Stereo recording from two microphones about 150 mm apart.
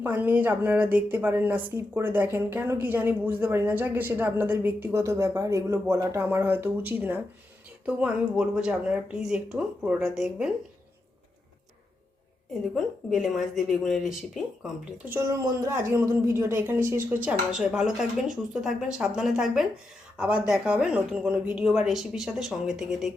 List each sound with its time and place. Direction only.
0.0 s a woman's voice: 10° right (ahead or behind)
12.7 s speech: centre (ahead or behind)
15.0 s a woman's voice: 20° right (ahead or behind); by 23.1 s centre (ahead or behind)